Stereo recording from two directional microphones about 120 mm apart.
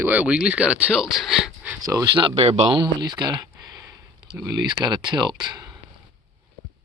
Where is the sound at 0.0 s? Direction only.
15° right (ahead or behind).